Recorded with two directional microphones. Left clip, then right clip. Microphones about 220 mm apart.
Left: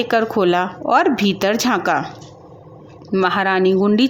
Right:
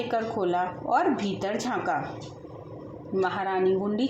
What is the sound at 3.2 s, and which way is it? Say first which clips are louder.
Speech: left 10 dB; 35° left (ahead or behind).